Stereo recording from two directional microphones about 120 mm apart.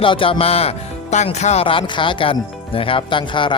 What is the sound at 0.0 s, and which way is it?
Speech, 45° left (ahead or behind).